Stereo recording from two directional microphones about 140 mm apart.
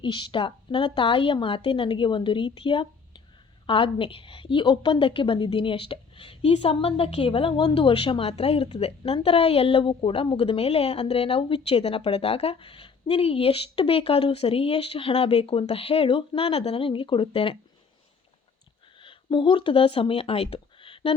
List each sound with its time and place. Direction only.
0.0 s a woman's voice: 35° left (ahead or behind)
18.9 s speech: 35° left (ahead or behind)